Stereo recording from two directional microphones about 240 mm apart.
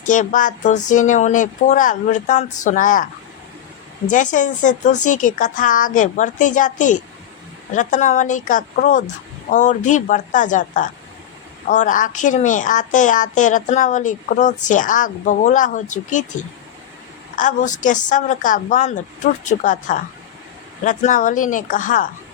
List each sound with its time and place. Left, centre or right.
0.0 s a woman's voice: left
4.1 s a woman's voice: left
17.3 s a woman's voice: left